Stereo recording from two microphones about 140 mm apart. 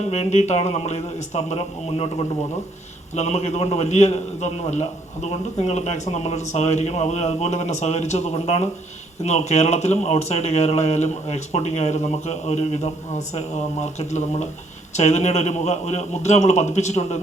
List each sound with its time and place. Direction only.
0.1 s a man's voice: 55° left (ahead or behind)